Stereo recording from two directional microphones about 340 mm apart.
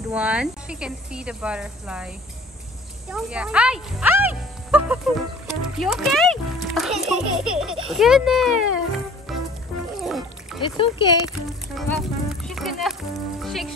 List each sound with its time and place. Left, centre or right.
0.1 s a child's voice: centre
9.9 s music: centre
10.8 s speech: centre
11.7 s speech: centre